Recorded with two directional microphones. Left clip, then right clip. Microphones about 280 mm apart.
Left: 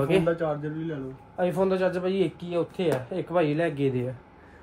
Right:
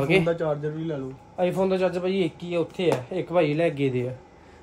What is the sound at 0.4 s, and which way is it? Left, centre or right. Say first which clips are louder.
Speech: right 2 dB; right.